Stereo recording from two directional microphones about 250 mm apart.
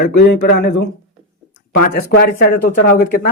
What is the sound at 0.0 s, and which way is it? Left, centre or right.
Speech, left.